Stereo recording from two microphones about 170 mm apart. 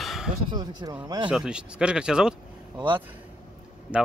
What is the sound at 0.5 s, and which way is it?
Speech, 25° right (ahead or behind).